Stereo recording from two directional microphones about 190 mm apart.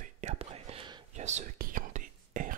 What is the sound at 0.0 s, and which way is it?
Whispering, 35° right (ahead or behind).